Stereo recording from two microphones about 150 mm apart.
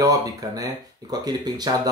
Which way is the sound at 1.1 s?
25° right (ahead or behind).